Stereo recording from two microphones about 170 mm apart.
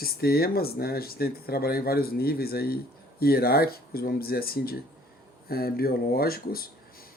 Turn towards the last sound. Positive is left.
turn(degrees=60)  # may be behind; listen again after turning